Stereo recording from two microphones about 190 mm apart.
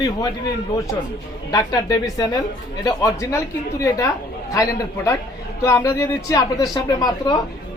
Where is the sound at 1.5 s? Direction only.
20° left (ahead or behind).